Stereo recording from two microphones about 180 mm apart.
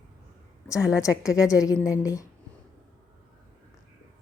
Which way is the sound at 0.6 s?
15° left (ahead or behind).